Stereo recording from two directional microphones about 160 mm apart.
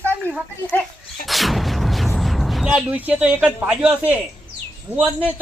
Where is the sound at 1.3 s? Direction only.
Centre (ahead or behind).